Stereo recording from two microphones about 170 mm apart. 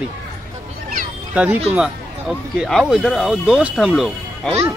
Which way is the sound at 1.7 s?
5° right (ahead or behind).